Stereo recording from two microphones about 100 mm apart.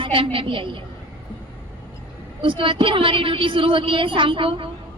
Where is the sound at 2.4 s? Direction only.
55° right (ahead or behind).